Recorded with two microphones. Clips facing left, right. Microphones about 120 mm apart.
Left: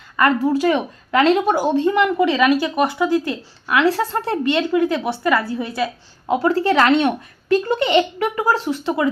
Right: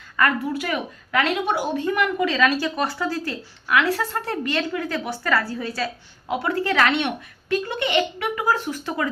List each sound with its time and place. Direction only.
0.4 s a woman's voice: 30° left (ahead or behind)
6.2 s a woman's voice: 35° left (ahead or behind)
6.9 s a woman's voice: 40° left (ahead or behind)
8.7 s a woman's voice: 20° left (ahead or behind)